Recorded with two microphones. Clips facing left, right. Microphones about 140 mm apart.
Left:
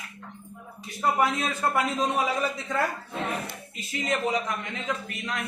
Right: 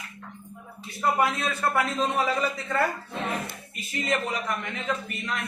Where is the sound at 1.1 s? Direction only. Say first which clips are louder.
Even; 15° left (ahead or behind).